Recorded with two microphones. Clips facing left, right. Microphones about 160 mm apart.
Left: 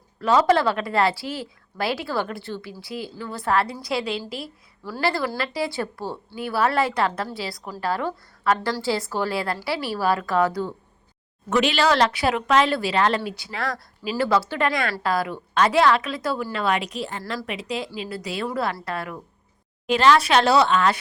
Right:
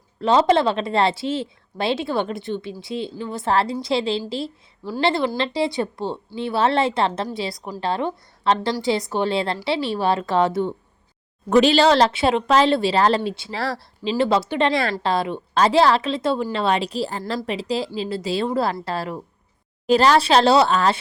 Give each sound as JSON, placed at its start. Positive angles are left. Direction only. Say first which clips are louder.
{"t": 0.2, "sound": "speech", "louder": "right 2 dB", "side_deg": -25}